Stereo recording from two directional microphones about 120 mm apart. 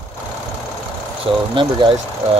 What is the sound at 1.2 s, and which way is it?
Speech, 45° right (ahead or behind).